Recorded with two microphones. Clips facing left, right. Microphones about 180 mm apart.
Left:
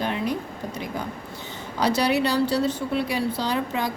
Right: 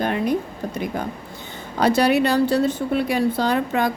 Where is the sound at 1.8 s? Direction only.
50° right (ahead or behind).